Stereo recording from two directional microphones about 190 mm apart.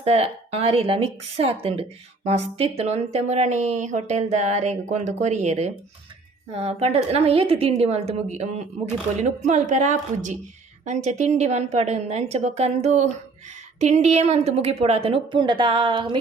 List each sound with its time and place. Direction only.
0.0 s a woman's voice: 30° right (ahead or behind)